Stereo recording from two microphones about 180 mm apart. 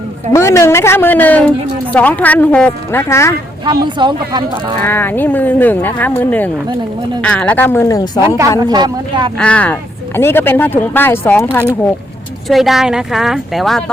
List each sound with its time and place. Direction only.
0.3 s a woman's voice: 15° left (ahead or behind)
3.7 s speech: 25° right (ahead or behind)
4.8 s a woman's voice: 10° left (ahead or behind)
8.4 s speech: 25° right (ahead or behind)
9.4 s a woman's voice: 5° left (ahead or behind)
12.5 s speech: centre (ahead or behind)